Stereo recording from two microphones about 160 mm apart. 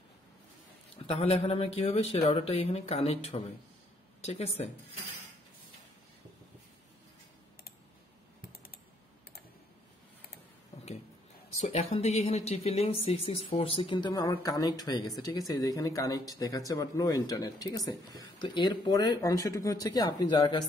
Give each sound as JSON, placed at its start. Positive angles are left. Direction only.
{"t": 1.0, "sound": "speech", "side_deg": 35}
{"t": 11.6, "sound": "speech", "side_deg": 40}